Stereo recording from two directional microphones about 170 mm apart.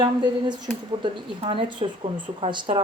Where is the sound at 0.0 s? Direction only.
25° right (ahead or behind).